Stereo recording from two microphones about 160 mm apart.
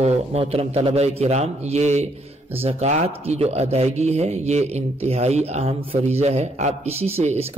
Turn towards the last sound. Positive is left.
turn(degrees=-40)  # may be behind; listen again after turning